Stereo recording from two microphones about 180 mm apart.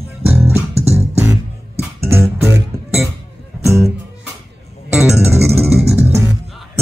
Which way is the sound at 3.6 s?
15° right (ahead or behind).